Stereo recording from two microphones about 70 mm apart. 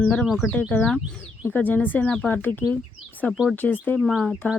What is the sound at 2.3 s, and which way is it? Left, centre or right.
Speech, left.